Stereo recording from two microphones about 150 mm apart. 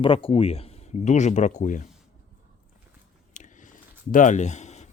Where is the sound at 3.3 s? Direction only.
55° left (ahead or behind).